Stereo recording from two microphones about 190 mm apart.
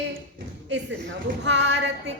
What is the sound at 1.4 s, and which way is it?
Speech, 70° right (ahead or behind).